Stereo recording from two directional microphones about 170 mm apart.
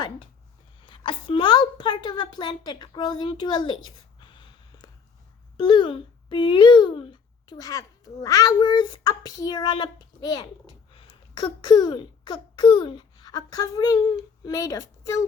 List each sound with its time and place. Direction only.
0.9 s a woman's voice: 30° left (ahead or behind)
4.2 s a sound: 30° left (ahead or behind)
5.5 s speech: 30° left (ahead or behind)